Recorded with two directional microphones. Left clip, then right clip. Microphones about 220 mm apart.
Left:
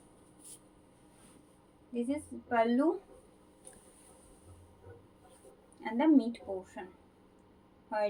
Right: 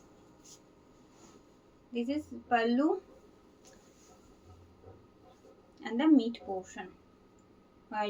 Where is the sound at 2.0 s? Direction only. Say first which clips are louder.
Right 1 dB; 20° right (ahead or behind).